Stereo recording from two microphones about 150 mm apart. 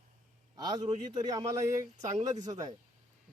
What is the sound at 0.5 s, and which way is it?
A man's voice, 25° right (ahead or behind).